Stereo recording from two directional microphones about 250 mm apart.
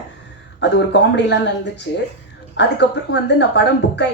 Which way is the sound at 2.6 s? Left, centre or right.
Left.